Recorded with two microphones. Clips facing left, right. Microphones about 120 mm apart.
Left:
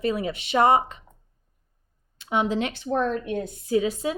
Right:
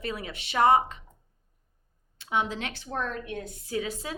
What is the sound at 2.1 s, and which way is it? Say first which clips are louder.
A woman's voice: left 5 dB; 20° left (ahead or behind).